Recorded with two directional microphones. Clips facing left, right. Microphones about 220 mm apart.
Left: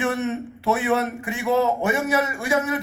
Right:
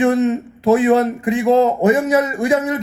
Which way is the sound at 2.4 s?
30° right (ahead or behind).